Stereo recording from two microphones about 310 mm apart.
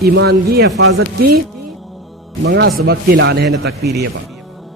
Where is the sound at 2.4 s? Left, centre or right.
Right.